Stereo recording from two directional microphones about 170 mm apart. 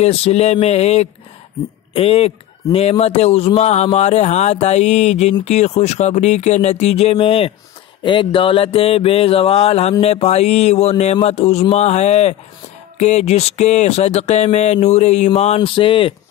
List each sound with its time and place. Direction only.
0.0 s mantra: 40° left (ahead or behind)